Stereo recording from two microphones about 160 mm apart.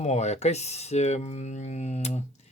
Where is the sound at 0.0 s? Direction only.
45° left (ahead or behind).